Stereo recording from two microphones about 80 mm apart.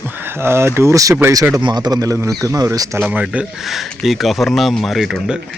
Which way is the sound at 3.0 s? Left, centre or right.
Centre.